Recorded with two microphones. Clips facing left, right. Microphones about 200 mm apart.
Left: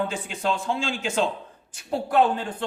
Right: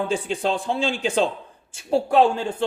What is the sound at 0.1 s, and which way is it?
A man's voice, 35° right (ahead or behind).